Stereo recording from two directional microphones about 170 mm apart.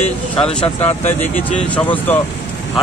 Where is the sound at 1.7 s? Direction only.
10° left (ahead or behind).